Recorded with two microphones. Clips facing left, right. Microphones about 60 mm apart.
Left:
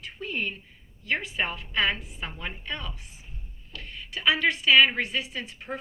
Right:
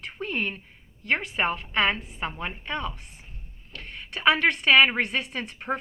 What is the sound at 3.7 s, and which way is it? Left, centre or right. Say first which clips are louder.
Speech: right 1 dB; right.